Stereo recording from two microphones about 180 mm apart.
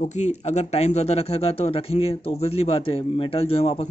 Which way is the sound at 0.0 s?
40° left (ahead or behind).